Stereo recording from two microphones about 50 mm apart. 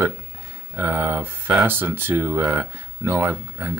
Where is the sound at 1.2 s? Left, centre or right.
Right.